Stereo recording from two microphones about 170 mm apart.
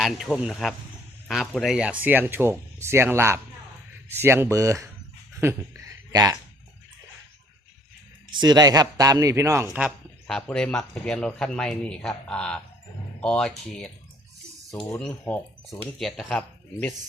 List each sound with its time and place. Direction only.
0.0 s speech: centre (ahead or behind); by 4.9 s 20° right (ahead or behind)
5.4 s a sound: 15° right (ahead or behind)
8.3 s speech: 25° right (ahead or behind); by 13.9 s 5° left (ahead or behind)
14.9 s speech: 10° left (ahead or behind)